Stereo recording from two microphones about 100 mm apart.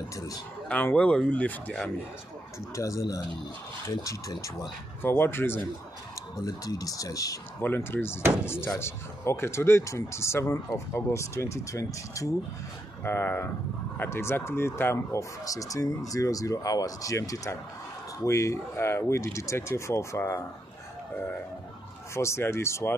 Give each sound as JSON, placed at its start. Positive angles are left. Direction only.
{"t": 0.7, "sound": "speech", "side_deg": 15}
{"t": 2.7, "sound": "speech", "side_deg": 30}
{"t": 5.0, "sound": "speech", "side_deg": 20}
{"t": 6.4, "sound": "speech", "side_deg": 35}
{"t": 7.6, "sound": "speech", "side_deg": 20}
{"t": 15.4, "sound": "speech", "side_deg": 35}
{"t": 22.1, "sound": "speech", "side_deg": 30}